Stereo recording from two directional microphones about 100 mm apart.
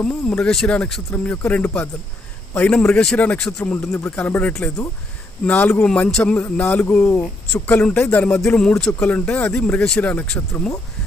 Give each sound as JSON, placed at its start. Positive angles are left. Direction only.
{"t": 0.0, "sound": "speech", "side_deg": 10}